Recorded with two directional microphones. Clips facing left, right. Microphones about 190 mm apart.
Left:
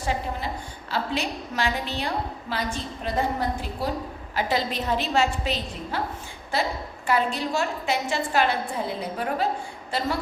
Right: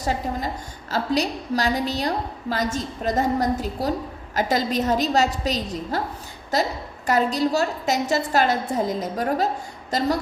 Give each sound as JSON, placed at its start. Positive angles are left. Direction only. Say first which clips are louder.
{"t": 0.0, "sound": "a woman's voice", "louder": "right 3 dB", "side_deg": -40}